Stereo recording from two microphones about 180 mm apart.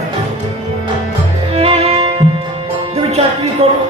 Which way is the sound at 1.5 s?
35° right (ahead or behind).